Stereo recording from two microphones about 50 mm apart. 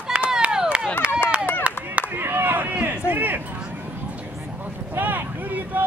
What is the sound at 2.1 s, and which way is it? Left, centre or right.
Chop, right.